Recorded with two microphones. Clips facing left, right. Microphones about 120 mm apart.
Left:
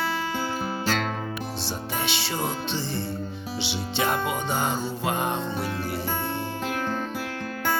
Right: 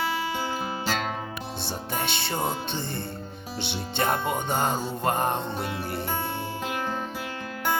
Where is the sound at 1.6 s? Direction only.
55° right (ahead or behind).